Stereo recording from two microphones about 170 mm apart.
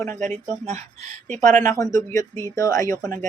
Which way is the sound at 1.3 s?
45° right (ahead or behind).